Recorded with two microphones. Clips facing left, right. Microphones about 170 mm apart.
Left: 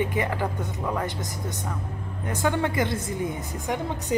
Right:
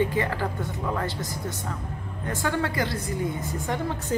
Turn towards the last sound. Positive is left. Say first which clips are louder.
# left 1 dB
turn(degrees=20)  # may be behind; listen again after turning